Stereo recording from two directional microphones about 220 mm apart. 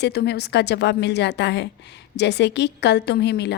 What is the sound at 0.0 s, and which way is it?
A woman's voice, 45° left (ahead or behind).